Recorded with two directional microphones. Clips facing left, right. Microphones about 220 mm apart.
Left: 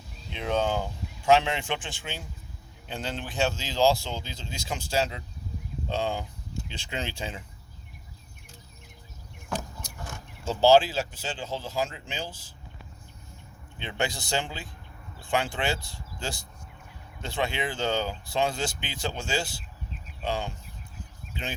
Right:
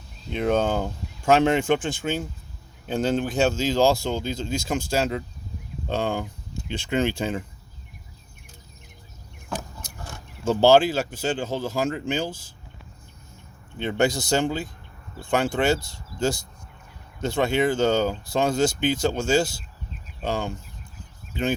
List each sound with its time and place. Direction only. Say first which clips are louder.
0.3 s speech: right 5 dB; 45° right (ahead or behind)
10.4 s speech: right 3 dB; 50° right (ahead or behind)
13.7 s speech: right 9 dB; 45° right (ahead or behind)